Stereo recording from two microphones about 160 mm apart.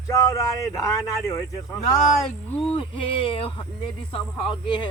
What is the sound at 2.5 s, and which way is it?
Speech, 35° left (ahead or behind).